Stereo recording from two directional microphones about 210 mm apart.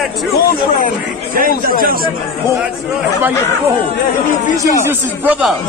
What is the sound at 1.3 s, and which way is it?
Speech, 40° right (ahead or behind).